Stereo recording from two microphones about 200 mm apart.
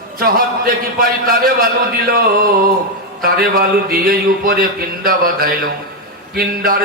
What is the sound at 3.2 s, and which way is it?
Speech, 45° right (ahead or behind).